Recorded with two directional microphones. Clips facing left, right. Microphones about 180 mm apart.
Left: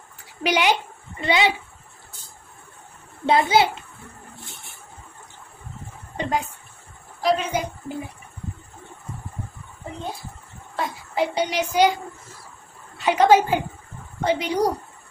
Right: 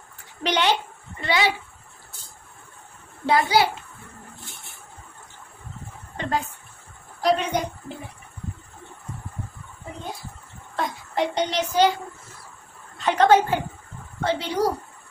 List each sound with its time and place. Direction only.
0.4 s a woman's voice: 10° left (ahead or behind)
1.1 s speech: 20° left (ahead or behind)
3.3 s a child's voice: 20° left (ahead or behind)
6.1 s speech: 15° left (ahead or behind)
7.2 s a woman's voice: centre (ahead or behind)
10.8 s a woman's voice: 5° left (ahead or behind)
12.9 s a woman's voice: 10° left (ahead or behind)